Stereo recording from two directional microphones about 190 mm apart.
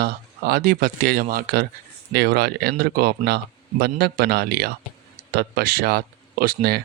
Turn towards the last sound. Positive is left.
turn(degrees=-55)  # may be behind; listen again after turning